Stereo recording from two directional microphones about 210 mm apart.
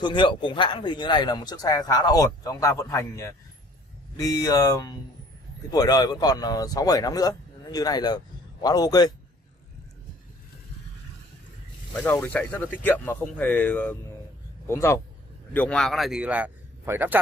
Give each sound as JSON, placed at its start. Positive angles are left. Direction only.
{"t": 0.0, "sound": "speech", "side_deg": 25}
{"t": 11.9, "sound": "a man's voice", "side_deg": 5}